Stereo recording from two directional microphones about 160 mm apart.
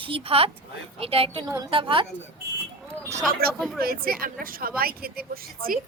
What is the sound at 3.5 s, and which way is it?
Speech, centre (ahead or behind).